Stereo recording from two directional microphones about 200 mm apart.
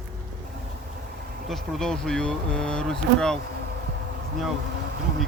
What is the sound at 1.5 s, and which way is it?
Speech, centre (ahead or behind).